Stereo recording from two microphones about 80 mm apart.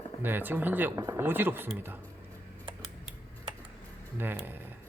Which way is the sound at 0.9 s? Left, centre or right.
Right.